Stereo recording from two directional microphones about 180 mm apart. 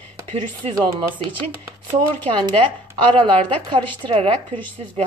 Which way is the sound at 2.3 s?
25° right (ahead or behind).